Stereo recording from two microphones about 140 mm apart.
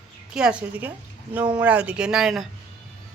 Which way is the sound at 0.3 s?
5° right (ahead or behind).